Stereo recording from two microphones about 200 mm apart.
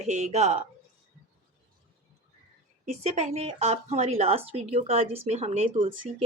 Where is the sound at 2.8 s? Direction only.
35° right (ahead or behind).